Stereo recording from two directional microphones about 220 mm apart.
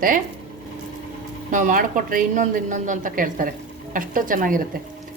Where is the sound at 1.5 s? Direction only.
35° right (ahead or behind).